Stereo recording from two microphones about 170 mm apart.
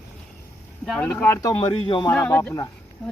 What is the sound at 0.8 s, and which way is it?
Speech, 5° left (ahead or behind).